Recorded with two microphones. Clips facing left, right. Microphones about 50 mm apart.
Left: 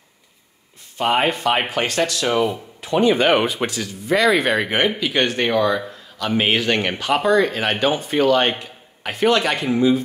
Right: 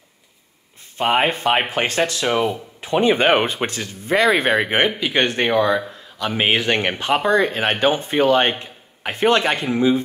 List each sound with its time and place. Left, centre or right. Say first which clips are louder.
0.9 s speech: even; right